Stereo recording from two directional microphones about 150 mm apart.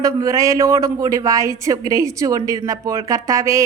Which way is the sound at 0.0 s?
20° right (ahead or behind).